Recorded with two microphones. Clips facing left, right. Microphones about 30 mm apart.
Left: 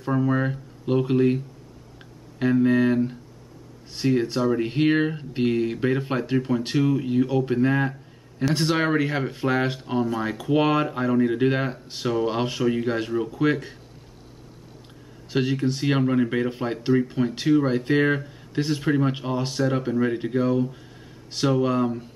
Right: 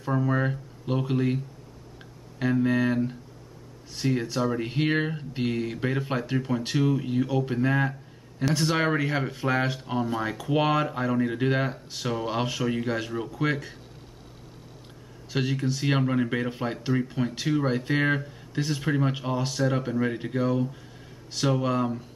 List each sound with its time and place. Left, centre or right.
0.0 s speech: centre
15.4 s speech: centre
15.8 s speech: centre